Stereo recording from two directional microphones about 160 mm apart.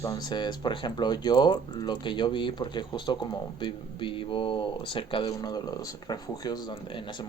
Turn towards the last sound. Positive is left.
turn(degrees=30)  # may be behind; listen again after turning